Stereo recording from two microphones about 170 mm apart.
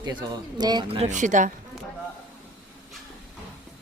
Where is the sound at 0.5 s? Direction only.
25° right (ahead or behind); by 1.5 s 45° right (ahead or behind).